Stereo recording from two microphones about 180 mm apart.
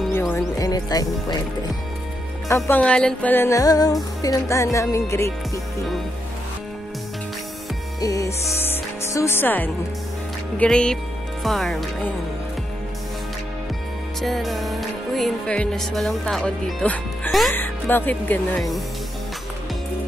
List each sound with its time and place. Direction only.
0.1 s speech: 15° left (ahead or behind)
2.4 s speech: 15° left (ahead or behind)
2.8 s music: 5° left (ahead or behind)
8.0 s speech: 20° left (ahead or behind)
10.6 s music: 5° left (ahead or behind)
14.2 s music: centre (ahead or behind)
17.6 s music: 10° left (ahead or behind)